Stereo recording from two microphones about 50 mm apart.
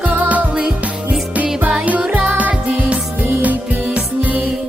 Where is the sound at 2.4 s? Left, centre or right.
Right.